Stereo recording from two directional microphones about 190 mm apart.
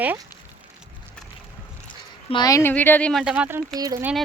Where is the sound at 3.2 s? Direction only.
5° right (ahead or behind).